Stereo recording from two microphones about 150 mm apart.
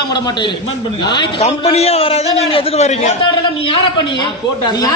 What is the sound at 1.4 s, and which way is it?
A man's voice, 45° left (ahead or behind).